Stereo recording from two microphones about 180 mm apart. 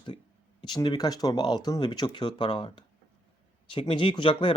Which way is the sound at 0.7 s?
25° left (ahead or behind).